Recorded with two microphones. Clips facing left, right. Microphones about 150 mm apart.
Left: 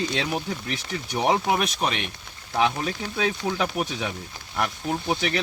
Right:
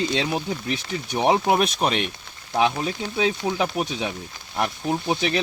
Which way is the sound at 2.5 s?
20° right (ahead or behind).